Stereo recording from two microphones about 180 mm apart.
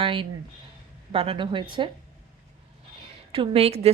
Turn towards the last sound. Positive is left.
turn(degrees=-35)  # may be behind; listen again after turning